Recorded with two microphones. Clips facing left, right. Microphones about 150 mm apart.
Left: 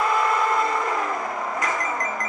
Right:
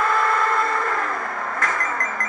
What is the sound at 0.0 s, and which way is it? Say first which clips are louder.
Vehicle: right 1 dB; 15° left (ahead or behind).